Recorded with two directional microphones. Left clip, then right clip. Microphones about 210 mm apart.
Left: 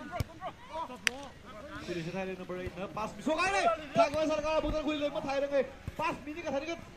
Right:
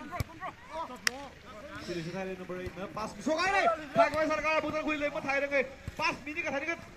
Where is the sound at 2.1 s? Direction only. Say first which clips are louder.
Even; 50° right (ahead or behind).